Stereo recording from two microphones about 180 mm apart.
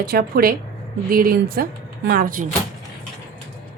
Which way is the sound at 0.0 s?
60° right (ahead or behind).